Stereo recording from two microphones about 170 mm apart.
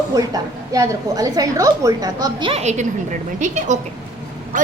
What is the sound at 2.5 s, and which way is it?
A woman's voice, 40° right (ahead or behind).